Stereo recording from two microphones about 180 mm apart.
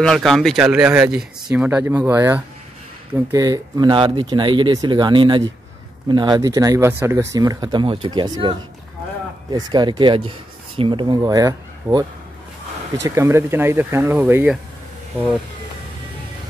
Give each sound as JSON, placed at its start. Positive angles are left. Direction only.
{"t": 0.0, "sound": "speech", "side_deg": 0}
{"t": 7.3, "sound": "speech", "side_deg": -25}